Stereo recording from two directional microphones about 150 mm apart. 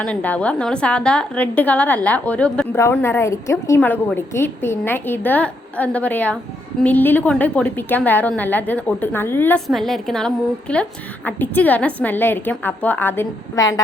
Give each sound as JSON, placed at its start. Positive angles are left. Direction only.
{"t": 0.0, "sound": "a woman's voice", "side_deg": 10}
{"t": 9.6, "sound": "a woman's voice", "side_deg": 0}